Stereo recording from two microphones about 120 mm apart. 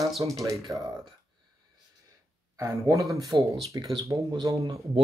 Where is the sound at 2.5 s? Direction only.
25° right (ahead or behind).